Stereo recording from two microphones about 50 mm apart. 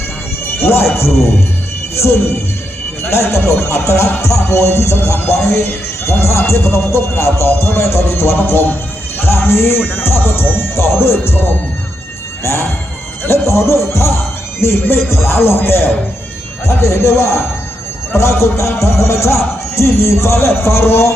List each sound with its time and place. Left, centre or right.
0.4 s music: left
0.9 s speech: left
12.4 s music: left
13.5 s speech: left
14.6 s speech: left
16.6 s speech: left